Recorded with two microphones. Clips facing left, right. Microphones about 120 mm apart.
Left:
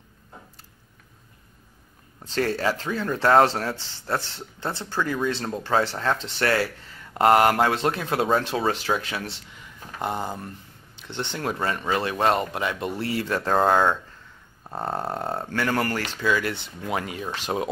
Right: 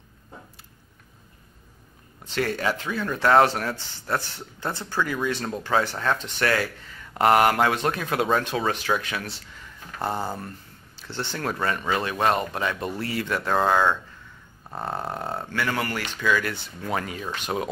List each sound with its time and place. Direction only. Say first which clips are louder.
2.3 s speech: left 1 dB; 35° left (ahead or behind)
10.1 s speech: right 1 dB; 5° right (ahead or behind)
11.0 s speech: even; 20° left (ahead or behind); by 13.9 s 40° left (ahead or behind)
15.3 s speech: left 2 dB; 40° left (ahead or behind)
16.2 s speech: right 1 dB; 25° left (ahead or behind)